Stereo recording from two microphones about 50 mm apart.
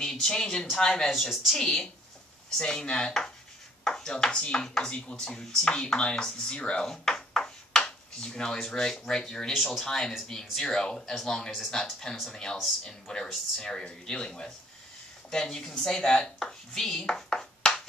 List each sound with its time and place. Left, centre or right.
0.0 s speech: centre
1.1 s speech: centre
1.6 s speech: centre
9.8 s speech: centre